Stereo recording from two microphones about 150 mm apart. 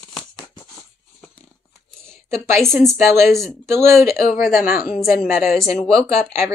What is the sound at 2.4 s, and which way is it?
Speech, 20° right (ahead or behind).